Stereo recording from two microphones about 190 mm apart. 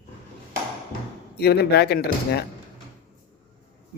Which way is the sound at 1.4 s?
55° left (ahead or behind).